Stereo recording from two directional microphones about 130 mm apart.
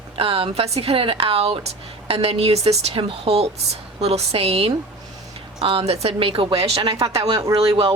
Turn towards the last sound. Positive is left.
turn(degrees=-40)  # may be behind; listen again after turning